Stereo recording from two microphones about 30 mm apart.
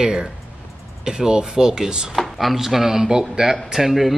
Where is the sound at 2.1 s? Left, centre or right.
Centre.